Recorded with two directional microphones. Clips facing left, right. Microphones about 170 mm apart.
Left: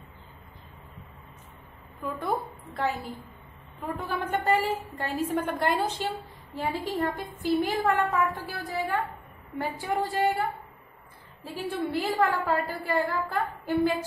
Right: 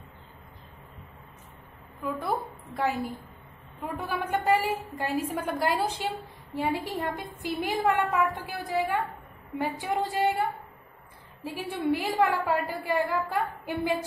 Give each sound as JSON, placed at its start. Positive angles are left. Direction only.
{"t": 2.0, "sound": "a woman's voice", "side_deg": -5}
{"t": 3.9, "sound": "a woman's voice", "side_deg": -10}
{"t": 11.4, "sound": "a woman's voice", "side_deg": -10}